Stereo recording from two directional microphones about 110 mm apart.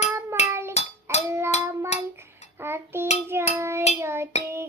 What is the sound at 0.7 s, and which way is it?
Music, 80° left.